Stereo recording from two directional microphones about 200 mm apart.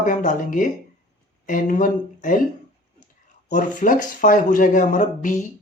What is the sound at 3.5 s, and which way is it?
Speech, 40° left (ahead or behind).